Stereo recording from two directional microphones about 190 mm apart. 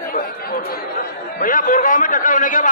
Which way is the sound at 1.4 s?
45° left (ahead or behind).